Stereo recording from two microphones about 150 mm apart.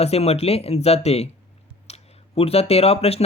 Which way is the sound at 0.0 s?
45° left (ahead or behind).